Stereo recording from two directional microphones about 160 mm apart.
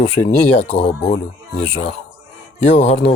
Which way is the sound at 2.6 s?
45° left (ahead or behind).